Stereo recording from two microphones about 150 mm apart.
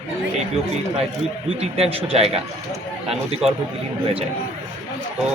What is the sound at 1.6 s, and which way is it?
Speech, 40° right (ahead or behind).